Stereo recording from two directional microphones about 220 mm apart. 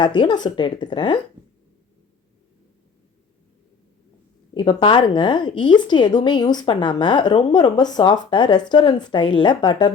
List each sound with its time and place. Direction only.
0.0 s a woman's voice: 20° left (ahead or behind)
4.5 s a woman's voice: 20° left (ahead or behind)